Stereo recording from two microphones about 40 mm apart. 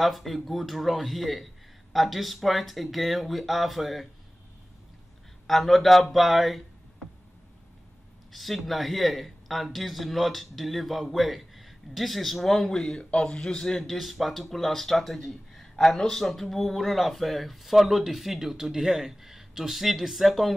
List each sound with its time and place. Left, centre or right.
0.0 s speech: centre
5.5 s speech: centre
8.3 s speech: centre
13.1 s a man's voice: left; by 13.9 s centre
13.9 s speech: centre